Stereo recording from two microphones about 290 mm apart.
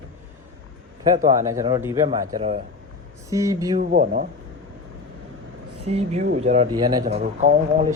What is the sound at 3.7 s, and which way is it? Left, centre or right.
Speech, right.